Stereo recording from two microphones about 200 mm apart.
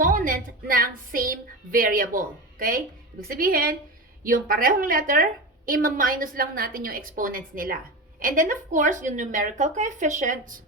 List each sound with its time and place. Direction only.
0.0 s a woman's voice: 40° right (ahead or behind)